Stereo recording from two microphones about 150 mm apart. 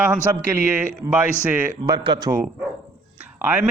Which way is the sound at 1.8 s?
25° right (ahead or behind).